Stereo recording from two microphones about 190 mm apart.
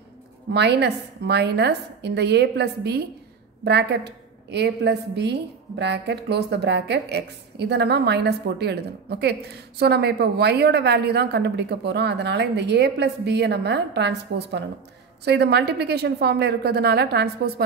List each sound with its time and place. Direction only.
0.5 s a woman's voice: 60° right (ahead or behind)